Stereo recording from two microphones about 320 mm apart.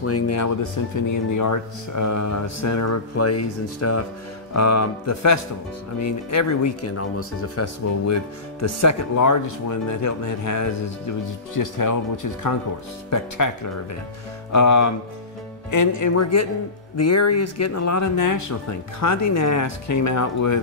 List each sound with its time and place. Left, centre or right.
0.0 s speech: left
1.0 s speech: left
11.5 s speech: left